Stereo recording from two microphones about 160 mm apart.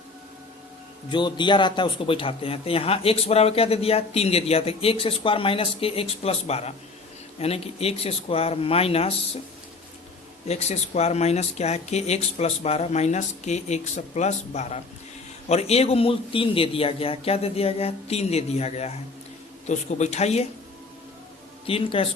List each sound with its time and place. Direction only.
1.1 s speech: 30° left (ahead or behind)
10.5 s speech: 40° left (ahead or behind)
21.7 s speech: 35° left (ahead or behind)